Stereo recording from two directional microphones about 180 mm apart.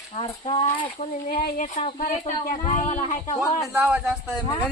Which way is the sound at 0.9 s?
50° left (ahead or behind).